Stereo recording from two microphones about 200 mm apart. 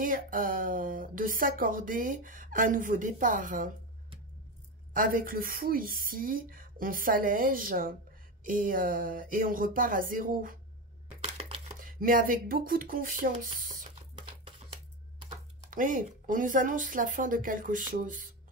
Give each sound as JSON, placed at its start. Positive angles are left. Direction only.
{"t": 0.0, "sound": "speech", "side_deg": -45}
{"t": 4.9, "sound": "speech", "side_deg": -45}
{"t": 11.1, "sound": "a sound", "side_deg": -30}
{"t": 11.8, "sound": "speech", "side_deg": -45}
{"t": 13.6, "sound": "a sound", "side_deg": -45}
{"t": 15.7, "sound": "speech", "side_deg": -40}